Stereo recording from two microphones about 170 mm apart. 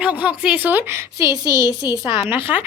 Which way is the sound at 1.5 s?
20° left (ahead or behind).